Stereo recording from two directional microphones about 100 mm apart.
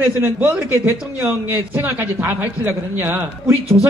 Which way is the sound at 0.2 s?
25° right (ahead or behind).